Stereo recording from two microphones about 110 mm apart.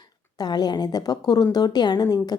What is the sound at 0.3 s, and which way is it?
A woman's voice, 40° left (ahead or behind).